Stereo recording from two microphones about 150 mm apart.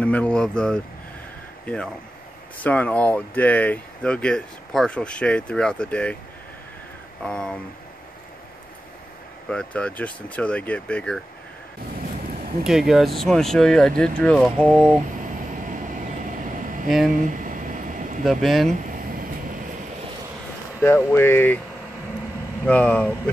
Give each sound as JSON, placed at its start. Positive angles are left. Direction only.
{"t": 0.0, "sound": "speech", "side_deg": 10}
{"t": 2.6, "sound": "speech", "side_deg": 10}
{"t": 7.2, "sound": "speech", "side_deg": 5}
{"t": 9.5, "sound": "speech", "side_deg": 5}
{"t": 12.6, "sound": "speech", "side_deg": -5}
{"t": 15.6, "sound": "air conditioning", "side_deg": -60}
{"t": 18.2, "sound": "speech", "side_deg": 0}
{"t": 18.8, "sound": "vehicle", "side_deg": -65}
{"t": 20.8, "sound": "speech", "side_deg": 15}
{"t": 22.7, "sound": "speech", "side_deg": 10}